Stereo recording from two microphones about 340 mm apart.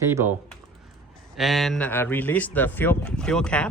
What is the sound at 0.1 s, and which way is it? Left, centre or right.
Speech, centre.